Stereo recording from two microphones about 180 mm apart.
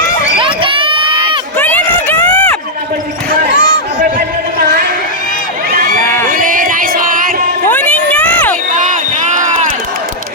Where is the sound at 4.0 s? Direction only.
55° right (ahead or behind).